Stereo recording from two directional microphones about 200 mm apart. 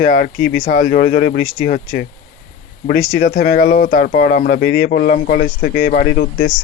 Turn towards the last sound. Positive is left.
turn(degrees=45)  # may be behind; listen again after turning